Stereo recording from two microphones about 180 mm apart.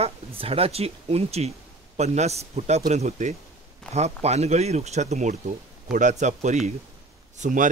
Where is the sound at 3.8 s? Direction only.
5° left (ahead or behind).